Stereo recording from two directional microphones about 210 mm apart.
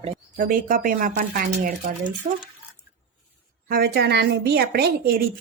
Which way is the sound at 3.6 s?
45° right (ahead or behind).